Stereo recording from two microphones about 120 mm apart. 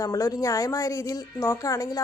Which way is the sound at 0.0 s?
30° left (ahead or behind).